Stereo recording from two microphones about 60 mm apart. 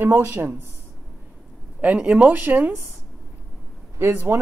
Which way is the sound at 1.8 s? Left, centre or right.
Right.